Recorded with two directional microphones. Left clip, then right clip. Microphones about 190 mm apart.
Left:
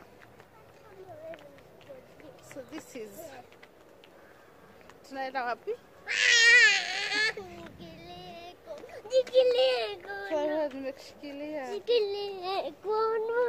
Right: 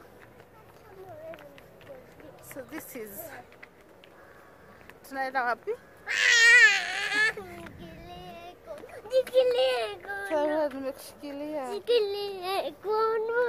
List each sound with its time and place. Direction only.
3.0 s speech: 15° right (ahead or behind)
5.1 s speech: 15° right (ahead or behind)
6.0 s baby cry: centre (ahead or behind)
10.8 s speech: 20° right (ahead or behind)
11.7 s a child's voice: 5° left (ahead or behind)